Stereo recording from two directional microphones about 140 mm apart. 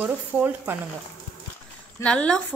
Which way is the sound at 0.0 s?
10° right (ahead or behind).